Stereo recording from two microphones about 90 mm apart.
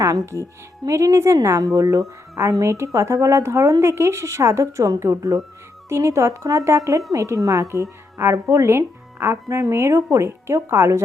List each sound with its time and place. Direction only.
0.9 s a woman's voice: 35° right (ahead or behind)